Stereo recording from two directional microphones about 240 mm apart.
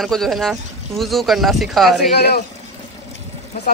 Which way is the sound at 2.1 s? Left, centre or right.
Left.